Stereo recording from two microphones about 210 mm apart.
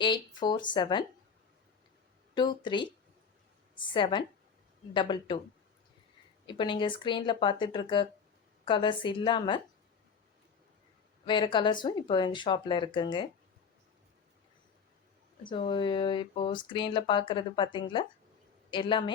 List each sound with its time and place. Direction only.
0.0 s speech: 20° left (ahead or behind)
2.3 s speech: 20° left (ahead or behind)
6.5 s speech: 20° left (ahead or behind)
11.3 s speech: 20° left (ahead or behind)
15.4 s speech: 25° left (ahead or behind)